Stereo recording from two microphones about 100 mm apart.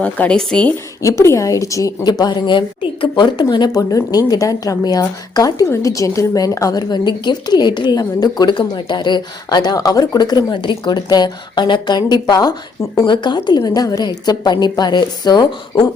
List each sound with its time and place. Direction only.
0.0 s speech: 10° left (ahead or behind)
1.0 s a woman's voice: 30° left (ahead or behind); by 13.6 s 50° left (ahead or behind)
13.6 s a woman's voice: 40° left (ahead or behind)